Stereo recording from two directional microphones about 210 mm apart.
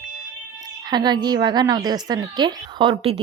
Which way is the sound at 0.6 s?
20° right (ahead or behind).